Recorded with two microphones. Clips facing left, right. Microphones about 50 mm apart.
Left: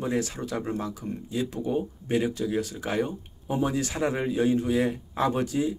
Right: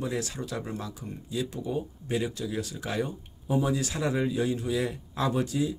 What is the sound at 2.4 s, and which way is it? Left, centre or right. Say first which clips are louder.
Speech: left 5 dB; left.